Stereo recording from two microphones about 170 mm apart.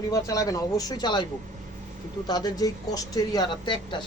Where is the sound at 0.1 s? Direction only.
20° left (ahead or behind).